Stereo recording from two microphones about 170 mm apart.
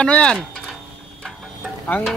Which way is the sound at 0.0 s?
5° left (ahead or behind).